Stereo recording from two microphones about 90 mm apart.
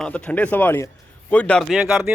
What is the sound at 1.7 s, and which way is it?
Speech, 5° right (ahead or behind).